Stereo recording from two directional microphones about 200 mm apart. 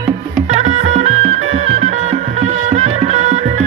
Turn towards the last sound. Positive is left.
turn(degrees=-35)  # may be behind; listen again after turning